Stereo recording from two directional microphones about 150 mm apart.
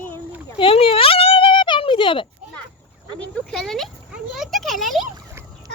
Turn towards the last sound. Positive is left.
turn(degrees=0)  # may be behind; listen again after turning